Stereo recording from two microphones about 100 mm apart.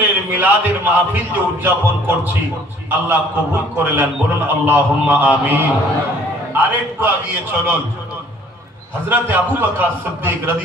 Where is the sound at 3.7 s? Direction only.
20° right (ahead or behind).